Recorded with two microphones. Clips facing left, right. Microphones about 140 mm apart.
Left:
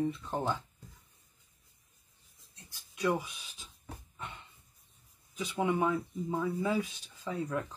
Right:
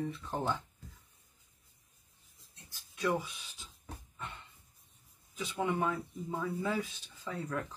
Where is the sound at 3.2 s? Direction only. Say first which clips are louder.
Right 1 dB; 15° left (ahead or behind).